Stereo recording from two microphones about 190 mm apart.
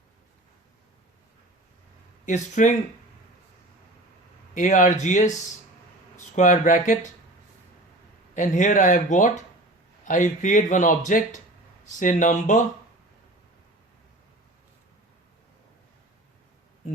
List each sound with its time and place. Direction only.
2.2 s a man's voice: 40° left (ahead or behind)
4.5 s a man's voice: 40° left (ahead or behind)
8.4 s a man's voice: 40° left (ahead or behind)